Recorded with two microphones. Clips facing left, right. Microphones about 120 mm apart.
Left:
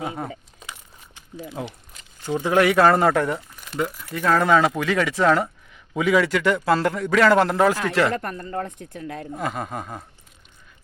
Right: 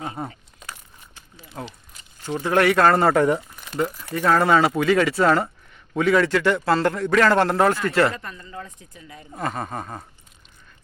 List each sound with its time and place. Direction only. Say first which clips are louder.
0.0 s a man's voice: left 2 dB; 5° left (ahead or behind)
0.6 s a sound: even; 15° left (ahead or behind)
1.6 s a man's voice: right 2 dB; 10° left (ahead or behind)
8.1 s a woman's voice: left 8 dB; 60° left (ahead or behind)
9.3 s a man's voice: right 2 dB; 5° left (ahead or behind)